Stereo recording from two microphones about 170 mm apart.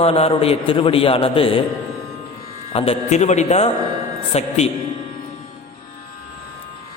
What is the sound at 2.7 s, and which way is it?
A man's voice, 35° left (ahead or behind).